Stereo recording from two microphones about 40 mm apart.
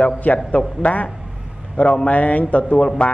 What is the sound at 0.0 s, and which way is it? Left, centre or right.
Speech, left.